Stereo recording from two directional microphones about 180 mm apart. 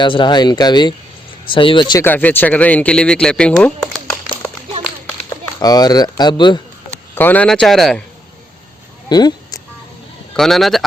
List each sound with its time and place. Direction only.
0.0 s speech: 25° left (ahead or behind)
2.0 s speech: 10° left (ahead or behind)
5.5 s speech: 20° left (ahead or behind)
7.2 s speech: 10° left (ahead or behind)
9.0 s a sound: 20° left (ahead or behind)
10.3 s speech: centre (ahead or behind)